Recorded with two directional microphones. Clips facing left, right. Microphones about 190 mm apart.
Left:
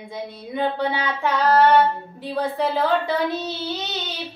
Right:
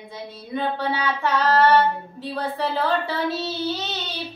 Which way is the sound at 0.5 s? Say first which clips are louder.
Left 2 dB; 15° left (ahead or behind).